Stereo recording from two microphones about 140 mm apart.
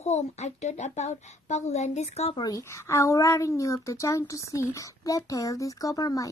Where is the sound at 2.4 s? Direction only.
25° left (ahead or behind).